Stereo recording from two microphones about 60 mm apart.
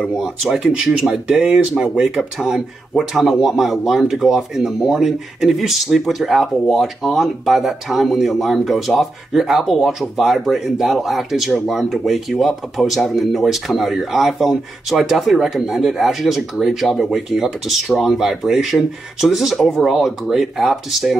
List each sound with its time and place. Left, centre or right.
0.0 s speech: centre